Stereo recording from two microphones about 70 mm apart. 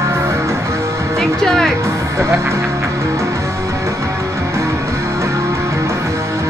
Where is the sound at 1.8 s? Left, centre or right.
Right.